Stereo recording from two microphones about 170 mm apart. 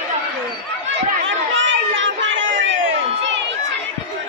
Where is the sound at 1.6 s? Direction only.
90° right.